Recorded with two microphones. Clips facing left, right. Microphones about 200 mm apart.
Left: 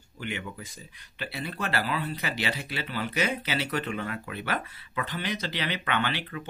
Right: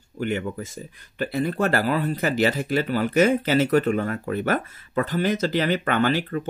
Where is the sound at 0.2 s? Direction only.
45° right (ahead or behind).